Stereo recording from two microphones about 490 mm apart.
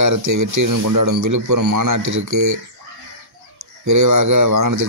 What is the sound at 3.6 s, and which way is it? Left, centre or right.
Speech, right.